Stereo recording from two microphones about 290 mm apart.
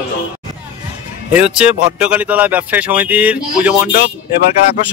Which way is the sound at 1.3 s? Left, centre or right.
Centre.